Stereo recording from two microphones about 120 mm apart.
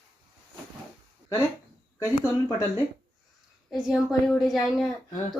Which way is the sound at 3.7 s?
Centre (ahead or behind).